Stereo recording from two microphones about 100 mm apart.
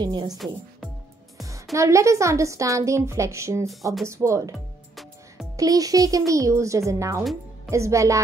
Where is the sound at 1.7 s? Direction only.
30° right (ahead or behind).